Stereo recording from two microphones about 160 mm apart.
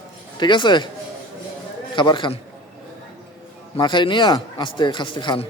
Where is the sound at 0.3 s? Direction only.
30° left (ahead or behind).